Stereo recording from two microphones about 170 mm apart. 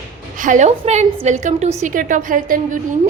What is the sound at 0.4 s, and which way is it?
A woman's voice, 45° right (ahead or behind).